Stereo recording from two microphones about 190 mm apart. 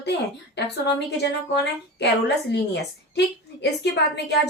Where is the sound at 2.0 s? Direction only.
65° left (ahead or behind).